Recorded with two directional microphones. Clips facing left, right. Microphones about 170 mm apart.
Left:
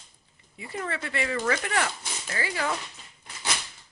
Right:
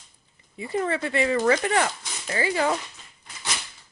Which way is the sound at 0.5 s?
25° right (ahead or behind).